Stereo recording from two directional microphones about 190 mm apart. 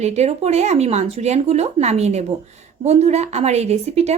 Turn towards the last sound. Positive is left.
turn(degrees=-35)  # may be behind; listen again after turning